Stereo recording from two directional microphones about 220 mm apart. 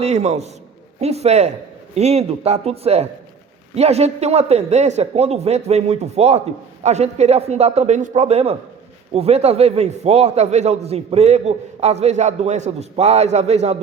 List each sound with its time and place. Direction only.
0.0 s a man's voice: 30° right (ahead or behind)